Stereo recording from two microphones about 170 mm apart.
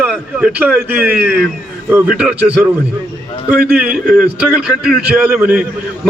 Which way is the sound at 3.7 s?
5° right (ahead or behind).